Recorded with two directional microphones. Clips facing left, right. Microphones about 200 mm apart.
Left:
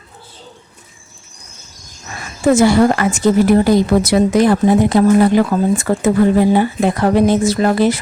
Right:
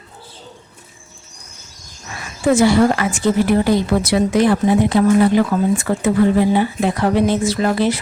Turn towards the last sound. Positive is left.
turn(degrees=45)  # may be behind; listen again after turning